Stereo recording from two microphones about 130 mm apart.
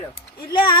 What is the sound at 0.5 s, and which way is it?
Speech, 40° left (ahead or behind).